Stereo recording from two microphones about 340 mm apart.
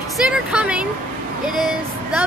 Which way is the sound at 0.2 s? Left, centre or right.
Centre.